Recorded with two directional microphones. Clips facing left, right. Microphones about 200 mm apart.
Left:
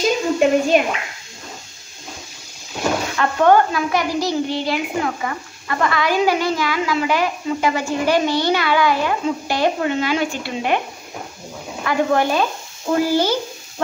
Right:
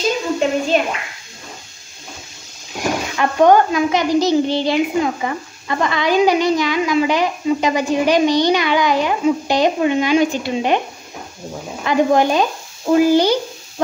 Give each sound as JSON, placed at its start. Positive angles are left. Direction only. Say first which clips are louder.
{"t": 0.4, "sound": "a woman's voice", "louder": "left 3 dB", "side_deg": 10}
{"t": 2.8, "sound": "a child's voice", "louder": "right 1 dB", "side_deg": -15}
{"t": 11.8, "sound": "a child's voice", "louder": "right 3 dB", "side_deg": -20}